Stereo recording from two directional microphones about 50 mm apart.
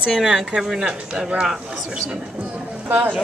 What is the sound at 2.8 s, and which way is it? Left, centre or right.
Speech, right.